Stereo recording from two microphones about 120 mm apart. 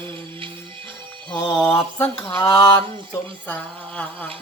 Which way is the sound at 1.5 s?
20° left (ahead or behind).